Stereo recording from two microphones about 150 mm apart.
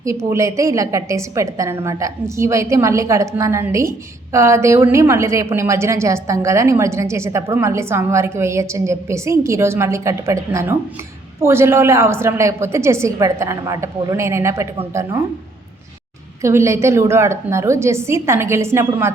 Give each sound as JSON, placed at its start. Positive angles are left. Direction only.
{"t": 0.0, "sound": "a woman's voice", "side_deg": -20}
{"t": 16.4, "sound": "a woman's voice", "side_deg": -20}